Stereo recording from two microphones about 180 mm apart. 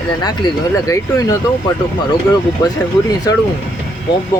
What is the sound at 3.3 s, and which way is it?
Speech, 20° left (ahead or behind).